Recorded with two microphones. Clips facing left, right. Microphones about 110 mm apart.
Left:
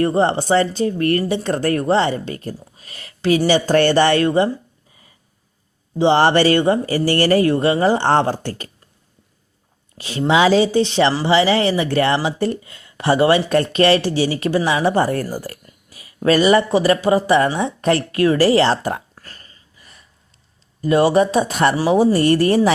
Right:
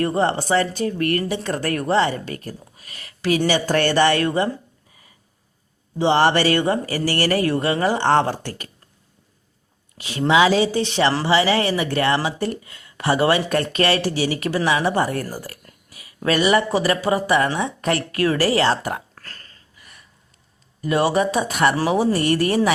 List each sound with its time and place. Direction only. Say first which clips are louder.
0.0 s speech: left 3 dB; 30° left (ahead or behind)
6.0 s speech: left 3 dB; 30° left (ahead or behind)
10.0 s speech: left 1 dB; 30° left (ahead or behind)
15.9 s a sound: left 5 dB; 35° left (ahead or behind)
16.7 s speech: left 4 dB; 25° left (ahead or behind)
19.1 s a sound: even; 10° left (ahead or behind)
20.8 s speech: left 5 dB; 30° left (ahead or behind)